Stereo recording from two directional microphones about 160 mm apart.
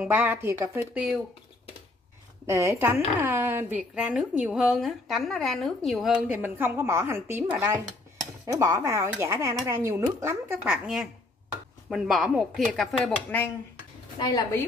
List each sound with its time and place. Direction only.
0.0 s a woman's voice: 10° right (ahead or behind)
2.4 s a woman's voice: 15° right (ahead or behind)
6.6 s a woman's voice: 15° right (ahead or behind); by 13.5 s 5° left (ahead or behind)
14.2 s a woman's voice: 25° left (ahead or behind)